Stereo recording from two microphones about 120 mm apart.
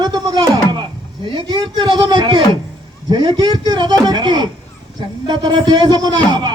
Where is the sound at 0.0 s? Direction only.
35° right (ahead or behind).